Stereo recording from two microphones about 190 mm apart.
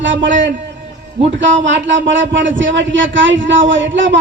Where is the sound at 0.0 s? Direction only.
75° right (ahead or behind).